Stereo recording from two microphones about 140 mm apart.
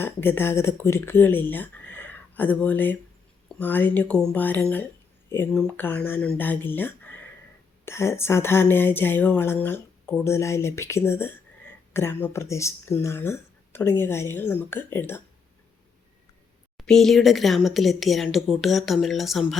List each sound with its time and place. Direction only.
0.0 s speech: 15° left (ahead or behind)
16.7 s speech: 5° left (ahead or behind)